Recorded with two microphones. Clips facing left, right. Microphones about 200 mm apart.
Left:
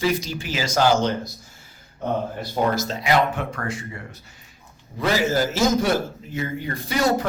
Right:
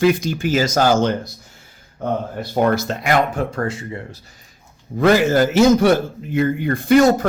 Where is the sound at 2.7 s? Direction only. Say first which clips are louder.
Right 3 dB; 60° right (ahead or behind).